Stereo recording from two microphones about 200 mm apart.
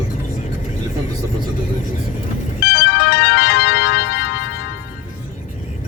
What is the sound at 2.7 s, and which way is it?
Music, 60° left (ahead or behind).